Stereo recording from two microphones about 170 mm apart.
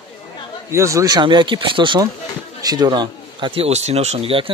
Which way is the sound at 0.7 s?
20° right (ahead or behind).